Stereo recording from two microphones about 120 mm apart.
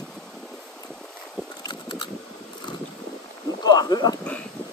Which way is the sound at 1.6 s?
40° left (ahead or behind).